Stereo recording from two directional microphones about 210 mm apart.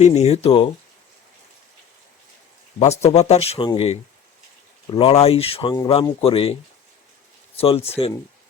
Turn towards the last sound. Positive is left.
turn(degrees=30)  # may be behind; listen again after turning